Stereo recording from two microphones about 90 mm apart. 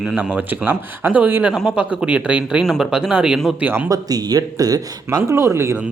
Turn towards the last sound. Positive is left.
turn(degrees=-30)  # may be behind; listen again after turning